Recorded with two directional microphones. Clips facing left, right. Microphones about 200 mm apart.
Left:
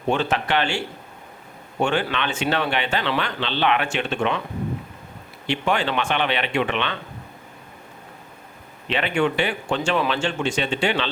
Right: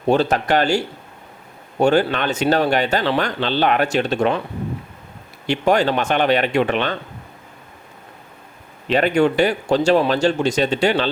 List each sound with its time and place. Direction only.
0.1 s speech: 40° right (ahead or behind)
5.5 s speech: 40° right (ahead or behind)
8.9 s speech: 40° right (ahead or behind)